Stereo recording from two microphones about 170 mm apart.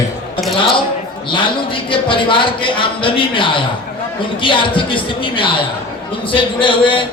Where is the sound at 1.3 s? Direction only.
30° left (ahead or behind).